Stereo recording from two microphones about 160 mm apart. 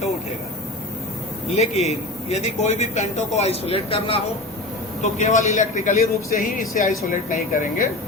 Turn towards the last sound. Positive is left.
turn(degrees=55)  # may be behind; listen again after turning